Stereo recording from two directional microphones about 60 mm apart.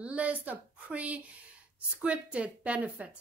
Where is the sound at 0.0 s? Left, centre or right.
Right.